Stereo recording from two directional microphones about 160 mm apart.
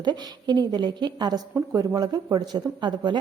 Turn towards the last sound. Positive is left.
turn(degrees=-30)  # may be behind; listen again after turning